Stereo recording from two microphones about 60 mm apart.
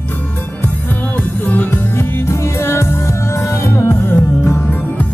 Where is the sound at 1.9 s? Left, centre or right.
Left.